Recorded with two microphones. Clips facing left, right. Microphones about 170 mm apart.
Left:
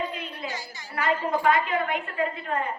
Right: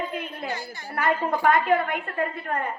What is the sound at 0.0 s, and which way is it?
A woman's voice, 50° right (ahead or behind).